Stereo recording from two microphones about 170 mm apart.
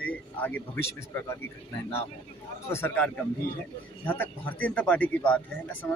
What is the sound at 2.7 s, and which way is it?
Speech, 15° left (ahead or behind).